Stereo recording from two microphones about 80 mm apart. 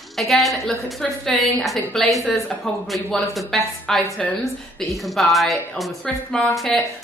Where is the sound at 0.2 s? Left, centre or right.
Centre.